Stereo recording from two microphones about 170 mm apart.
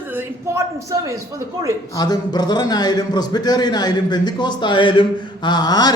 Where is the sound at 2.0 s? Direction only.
25° left (ahead or behind).